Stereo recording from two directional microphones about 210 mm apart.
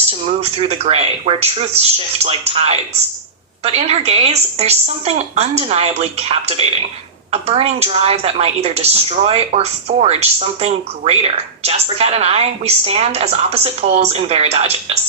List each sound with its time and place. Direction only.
0.3 s a woman's voice: 30° right (ahead or behind)